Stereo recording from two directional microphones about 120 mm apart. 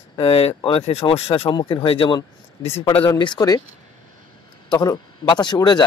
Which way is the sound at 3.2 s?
35° left (ahead or behind).